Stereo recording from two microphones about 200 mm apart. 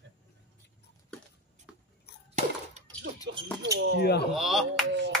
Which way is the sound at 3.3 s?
65° right (ahead or behind).